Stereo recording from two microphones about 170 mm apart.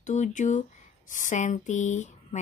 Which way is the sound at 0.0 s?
45° left (ahead or behind).